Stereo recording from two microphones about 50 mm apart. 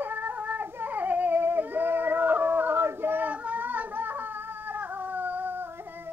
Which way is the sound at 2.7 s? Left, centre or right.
Right.